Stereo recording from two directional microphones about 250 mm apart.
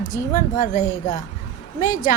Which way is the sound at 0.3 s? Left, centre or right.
Left.